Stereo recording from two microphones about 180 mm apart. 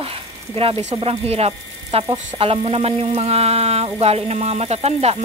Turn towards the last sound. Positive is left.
turn(degrees=-35)  # may be behind; listen again after turning